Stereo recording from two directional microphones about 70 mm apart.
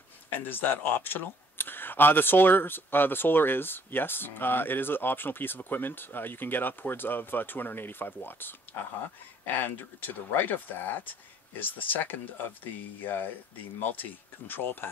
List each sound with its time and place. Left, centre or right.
0.4 s speech: left
14.5 s speech: left